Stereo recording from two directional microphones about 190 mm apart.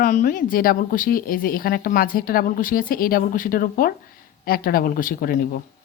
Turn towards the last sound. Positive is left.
turn(degrees=50)  # may be behind; listen again after turning